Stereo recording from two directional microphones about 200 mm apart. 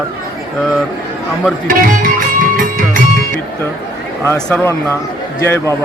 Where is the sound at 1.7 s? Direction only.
45° right (ahead or behind).